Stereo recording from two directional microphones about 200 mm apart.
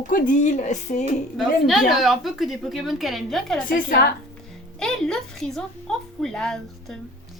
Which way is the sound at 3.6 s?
45° left (ahead or behind).